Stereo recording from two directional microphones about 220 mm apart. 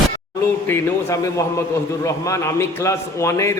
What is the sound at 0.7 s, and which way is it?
A man's voice, 15° left (ahead or behind).